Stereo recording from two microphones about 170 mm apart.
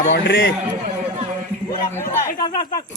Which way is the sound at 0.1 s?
75° left (ahead or behind).